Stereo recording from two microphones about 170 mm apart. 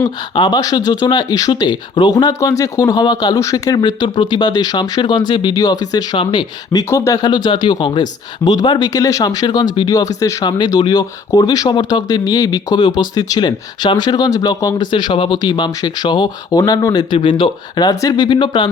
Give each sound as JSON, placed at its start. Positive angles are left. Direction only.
{"t": 0.0, "sound": "speech", "side_deg": 25}